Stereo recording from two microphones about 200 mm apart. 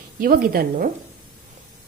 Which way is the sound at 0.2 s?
50° right (ahead or behind).